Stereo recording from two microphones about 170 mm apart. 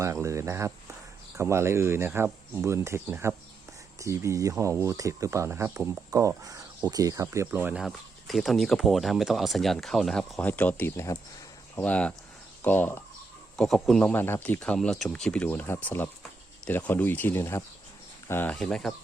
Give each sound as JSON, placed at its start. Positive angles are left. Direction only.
{"t": 0.0, "sound": "speech", "side_deg": -15}
{"t": 13.6, "sound": "speech", "side_deg": 0}